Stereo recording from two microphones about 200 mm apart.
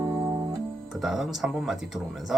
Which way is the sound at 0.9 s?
Centre (ahead or behind).